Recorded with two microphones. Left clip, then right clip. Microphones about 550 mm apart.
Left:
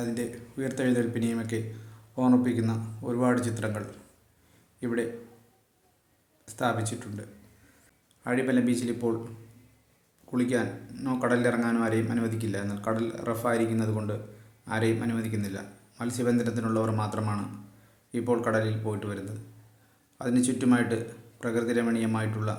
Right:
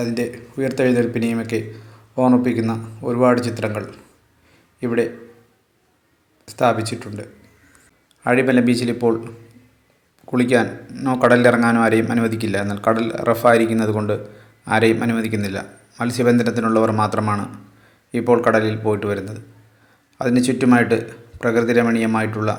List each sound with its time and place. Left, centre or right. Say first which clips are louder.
0.0 s a man's voice: right 10 dB; left
6.4 s a man's voice: right 11 dB; left
10.3 s a man's voice: right 11 dB; left